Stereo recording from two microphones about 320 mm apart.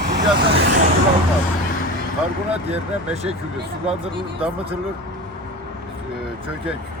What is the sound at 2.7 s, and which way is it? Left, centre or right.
Speech, centre.